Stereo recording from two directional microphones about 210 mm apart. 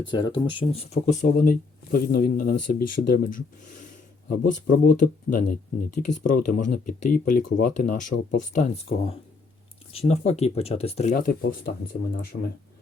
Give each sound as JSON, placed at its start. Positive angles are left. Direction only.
{"t": 0.1, "sound": "speech", "side_deg": 20}
{"t": 11.1, "sound": "speech", "side_deg": 45}